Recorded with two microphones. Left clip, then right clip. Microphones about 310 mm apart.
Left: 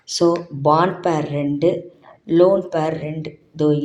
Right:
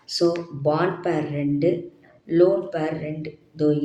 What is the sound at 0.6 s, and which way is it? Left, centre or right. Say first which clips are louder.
Speech: left 6 dB; left.